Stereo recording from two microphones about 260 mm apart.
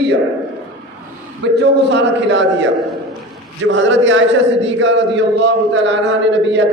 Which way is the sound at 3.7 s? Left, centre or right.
Right.